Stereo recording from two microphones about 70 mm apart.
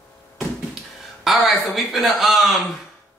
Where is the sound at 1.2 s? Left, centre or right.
Centre.